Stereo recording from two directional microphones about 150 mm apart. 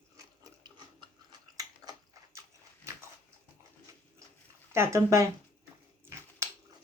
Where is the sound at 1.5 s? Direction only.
25° right (ahead or behind).